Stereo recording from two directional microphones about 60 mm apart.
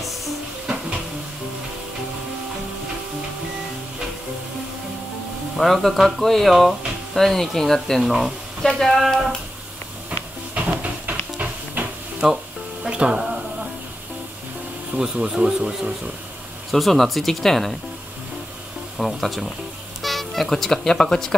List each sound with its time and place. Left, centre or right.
5.6 s speech: centre
10.5 s hiss: right
12.2 s speech: centre
12.8 s music: centre
15.0 s speech: centre
16.7 s speech: centre
18.9 s speech: centre